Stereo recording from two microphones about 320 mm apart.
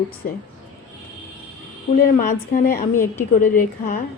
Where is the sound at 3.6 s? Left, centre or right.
Left.